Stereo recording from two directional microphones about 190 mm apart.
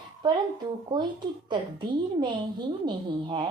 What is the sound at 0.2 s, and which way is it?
Speech, 20° right (ahead or behind).